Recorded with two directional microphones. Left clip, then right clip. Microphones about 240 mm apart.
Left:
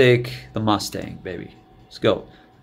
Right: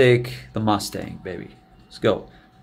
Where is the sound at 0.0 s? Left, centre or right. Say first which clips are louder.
Left 1 dB; centre.